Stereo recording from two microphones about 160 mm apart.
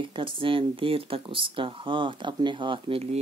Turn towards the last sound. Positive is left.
turn(degrees=-40)  # may be behind; listen again after turning